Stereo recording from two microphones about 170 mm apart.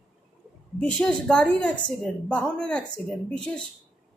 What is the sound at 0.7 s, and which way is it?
A woman's voice, 5° left (ahead or behind).